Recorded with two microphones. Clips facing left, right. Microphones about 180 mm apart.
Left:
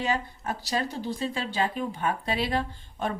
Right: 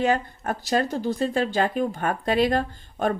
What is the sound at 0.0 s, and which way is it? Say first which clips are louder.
Speech: right 6 dB; 55° right (ahead or behind).